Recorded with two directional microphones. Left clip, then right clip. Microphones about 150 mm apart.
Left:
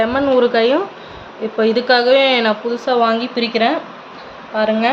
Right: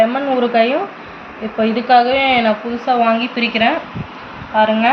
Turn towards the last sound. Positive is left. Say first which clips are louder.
# right 3 dB
turn(degrees=60)  # may be behind; listen again after turning